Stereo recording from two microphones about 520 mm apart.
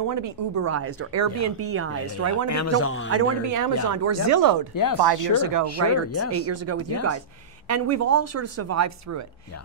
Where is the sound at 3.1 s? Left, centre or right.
Right.